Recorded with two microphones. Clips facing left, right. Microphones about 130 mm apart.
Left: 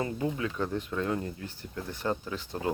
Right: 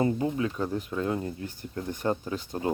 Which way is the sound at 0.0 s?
30° right (ahead or behind).